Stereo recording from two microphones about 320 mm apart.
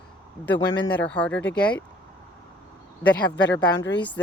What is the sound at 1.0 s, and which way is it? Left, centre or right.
Speech, centre.